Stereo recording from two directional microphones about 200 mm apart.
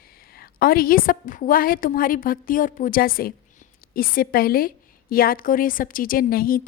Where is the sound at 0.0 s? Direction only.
50° left (ahead or behind).